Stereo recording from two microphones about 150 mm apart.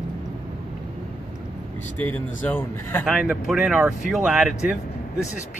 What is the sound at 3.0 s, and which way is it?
Speech, 5° right (ahead or behind).